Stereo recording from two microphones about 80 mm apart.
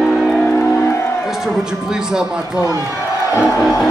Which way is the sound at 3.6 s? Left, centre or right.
Centre.